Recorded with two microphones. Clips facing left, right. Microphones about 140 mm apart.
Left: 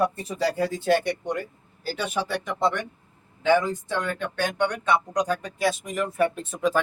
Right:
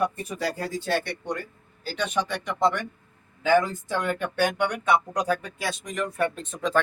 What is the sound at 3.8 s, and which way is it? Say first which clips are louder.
Speech: right 1 dB; 10° right (ahead or behind).